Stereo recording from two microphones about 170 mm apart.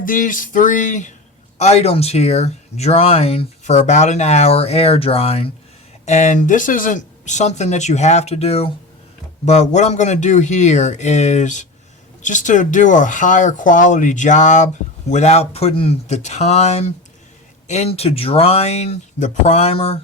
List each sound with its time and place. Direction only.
0.0 s speech: 50° left (ahead or behind); by 20.0 s 35° left (ahead or behind)